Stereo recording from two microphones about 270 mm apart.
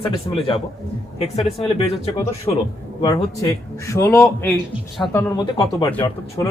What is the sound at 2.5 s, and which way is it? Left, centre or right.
Speech, centre.